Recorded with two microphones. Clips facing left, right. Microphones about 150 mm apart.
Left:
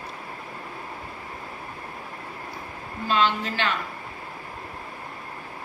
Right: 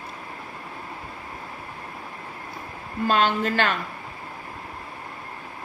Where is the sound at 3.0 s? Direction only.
50° right (ahead or behind).